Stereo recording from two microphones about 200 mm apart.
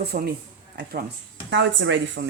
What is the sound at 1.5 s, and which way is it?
Speech, 65° right (ahead or behind).